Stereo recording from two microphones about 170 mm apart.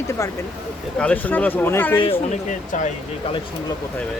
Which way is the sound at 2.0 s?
35° left (ahead or behind).